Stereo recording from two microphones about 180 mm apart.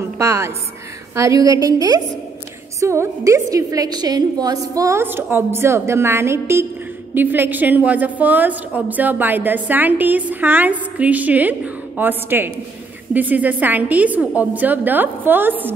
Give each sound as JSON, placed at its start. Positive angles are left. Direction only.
{"t": 0.2, "sound": "a woman's voice", "side_deg": -15}